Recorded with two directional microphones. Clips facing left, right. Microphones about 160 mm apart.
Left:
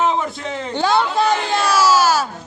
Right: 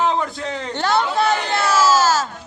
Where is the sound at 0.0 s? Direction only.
Centre (ahead or behind).